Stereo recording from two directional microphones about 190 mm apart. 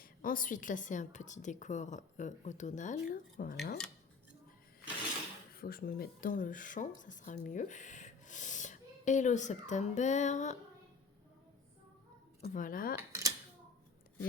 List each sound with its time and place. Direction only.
0.0 s a woman's voice: 45° left (ahead or behind)
5.5 s speech: 50° left (ahead or behind)
12.4 s speech: 45° left (ahead or behind)
13.0 s a sound: 15° right (ahead or behind)